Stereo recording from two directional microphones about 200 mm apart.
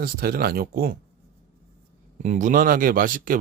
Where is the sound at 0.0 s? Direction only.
50° right (ahead or behind).